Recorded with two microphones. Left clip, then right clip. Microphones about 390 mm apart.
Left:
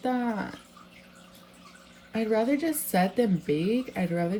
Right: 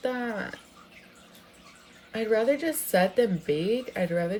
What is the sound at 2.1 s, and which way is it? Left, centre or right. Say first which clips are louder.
Speech: right 2 dB; centre.